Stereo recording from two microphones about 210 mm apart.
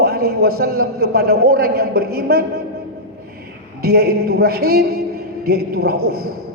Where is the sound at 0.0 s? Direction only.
50° right (ahead or behind).